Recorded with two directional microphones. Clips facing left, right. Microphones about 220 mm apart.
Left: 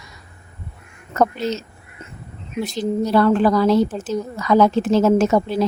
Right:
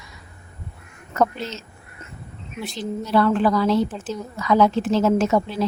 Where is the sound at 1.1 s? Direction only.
40° left (ahead or behind).